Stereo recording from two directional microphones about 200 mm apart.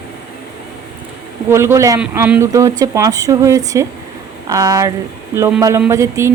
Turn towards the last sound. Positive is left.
turn(degrees=-15)  # may be behind; listen again after turning